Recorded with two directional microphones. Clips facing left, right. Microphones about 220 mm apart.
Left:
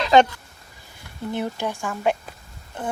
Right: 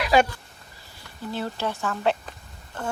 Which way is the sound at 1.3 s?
15° left (ahead or behind).